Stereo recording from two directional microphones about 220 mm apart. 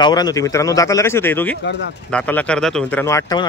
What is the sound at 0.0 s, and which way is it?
Speech, 15° left (ahead or behind).